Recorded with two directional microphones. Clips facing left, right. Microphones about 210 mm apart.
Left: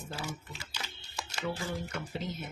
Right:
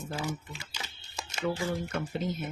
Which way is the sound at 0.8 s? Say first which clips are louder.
Left 1 dB; 15° right (ahead or behind).